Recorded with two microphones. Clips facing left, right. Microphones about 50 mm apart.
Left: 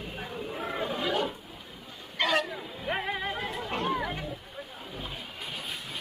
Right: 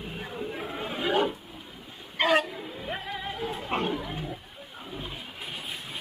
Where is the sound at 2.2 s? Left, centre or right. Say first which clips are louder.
Right 3 dB; right.